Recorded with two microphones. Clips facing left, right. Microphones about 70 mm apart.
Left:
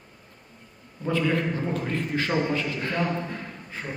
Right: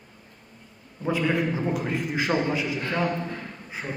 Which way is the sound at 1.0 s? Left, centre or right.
Centre.